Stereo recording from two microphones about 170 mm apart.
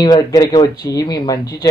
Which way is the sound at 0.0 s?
20° left (ahead or behind).